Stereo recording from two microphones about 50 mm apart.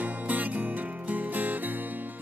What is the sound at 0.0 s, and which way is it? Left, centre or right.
Music, right.